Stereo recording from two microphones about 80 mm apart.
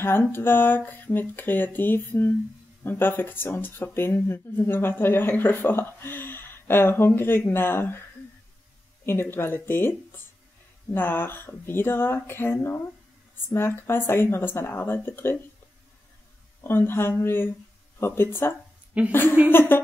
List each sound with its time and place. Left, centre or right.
0.3 s speech: left
9.0 s speech: left
16.6 s speech: left
18.9 s a woman's voice: centre
19.5 s speech: left